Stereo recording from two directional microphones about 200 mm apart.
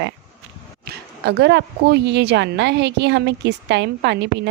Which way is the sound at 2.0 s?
60° right (ahead or behind).